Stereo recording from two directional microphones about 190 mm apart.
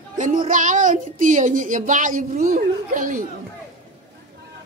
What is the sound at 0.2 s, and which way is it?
Speech, 45° right (ahead or behind).